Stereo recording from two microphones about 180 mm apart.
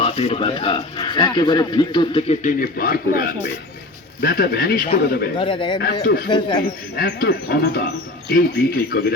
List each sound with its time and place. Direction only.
0.0 s speech: 30° left (ahead or behind); by 5.3 s 60° left (ahead or behind)
5.4 s speech: 25° left (ahead or behind)
5.8 s speech: 60° left (ahead or behind)